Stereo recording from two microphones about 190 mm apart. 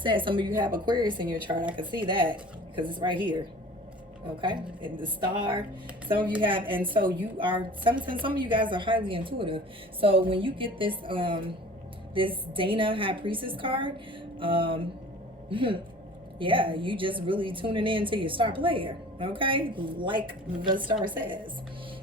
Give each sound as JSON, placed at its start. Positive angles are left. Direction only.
{"t": 0.0, "sound": "a woman's voice", "side_deg": -25}
{"t": 4.4, "sound": "a woman's voice", "side_deg": -25}